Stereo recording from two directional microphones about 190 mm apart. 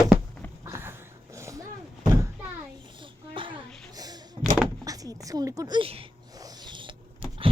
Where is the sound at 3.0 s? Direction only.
25° right (ahead or behind).